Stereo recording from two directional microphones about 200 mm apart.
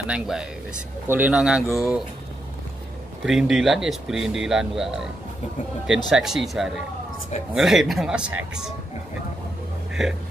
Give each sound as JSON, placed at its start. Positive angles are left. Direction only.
{"t": 0.0, "sound": "speech", "side_deg": -5}
{"t": 3.3, "sound": "speech", "side_deg": 0}
{"t": 6.0, "sound": "speech", "side_deg": 0}
{"t": 10.0, "sound": "speech", "side_deg": 0}